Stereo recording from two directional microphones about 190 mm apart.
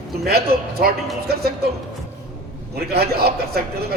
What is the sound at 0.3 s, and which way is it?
Speech, 55° right (ahead or behind).